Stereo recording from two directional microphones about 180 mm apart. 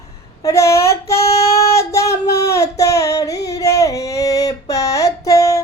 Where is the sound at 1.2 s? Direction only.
35° left (ahead or behind).